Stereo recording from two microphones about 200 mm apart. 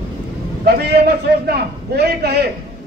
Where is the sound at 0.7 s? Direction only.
55° right (ahead or behind).